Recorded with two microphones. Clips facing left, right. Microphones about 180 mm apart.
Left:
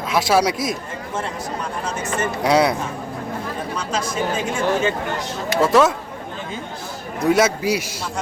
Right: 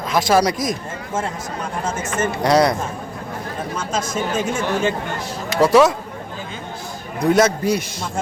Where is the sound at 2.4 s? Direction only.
5° left (ahead or behind).